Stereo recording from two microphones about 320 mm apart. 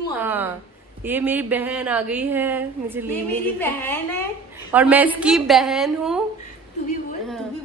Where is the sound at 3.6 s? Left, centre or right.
Centre.